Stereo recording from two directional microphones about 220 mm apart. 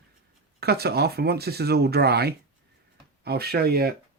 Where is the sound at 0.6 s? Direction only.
45° right (ahead or behind).